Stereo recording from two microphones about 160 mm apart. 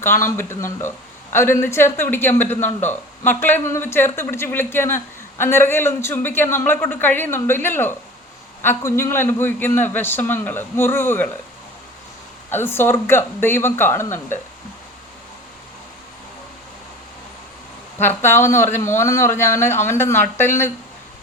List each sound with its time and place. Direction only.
0.0 s speech: 15° left (ahead or behind)
12.5 s speech: 15° left (ahead or behind)
18.0 s speech: 15° left (ahead or behind)